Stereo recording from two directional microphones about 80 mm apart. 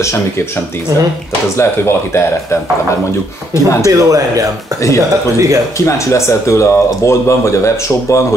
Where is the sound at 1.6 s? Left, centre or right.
Left.